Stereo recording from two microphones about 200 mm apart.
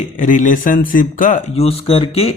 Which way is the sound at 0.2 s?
40° left (ahead or behind).